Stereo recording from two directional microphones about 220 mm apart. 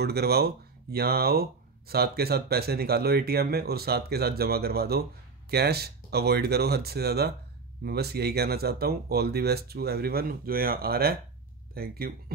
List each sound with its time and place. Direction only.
0.0 s speech: 45° right (ahead or behind)